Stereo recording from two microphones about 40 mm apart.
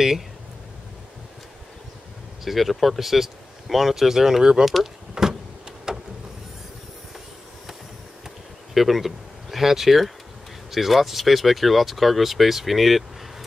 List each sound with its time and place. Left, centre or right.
2.4 s speech: centre
5.1 s power windows: centre
5.9 s vehicle: centre
8.7 s speech: centre